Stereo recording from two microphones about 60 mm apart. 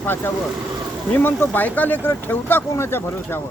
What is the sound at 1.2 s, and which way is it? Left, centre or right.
Speech, left.